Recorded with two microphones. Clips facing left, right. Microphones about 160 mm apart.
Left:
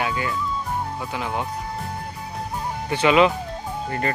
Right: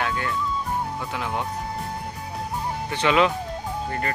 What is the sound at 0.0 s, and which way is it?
Speech, 5° left (ahead or behind).